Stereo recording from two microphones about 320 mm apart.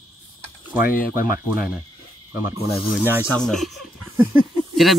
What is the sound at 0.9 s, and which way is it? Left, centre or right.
Speech, left.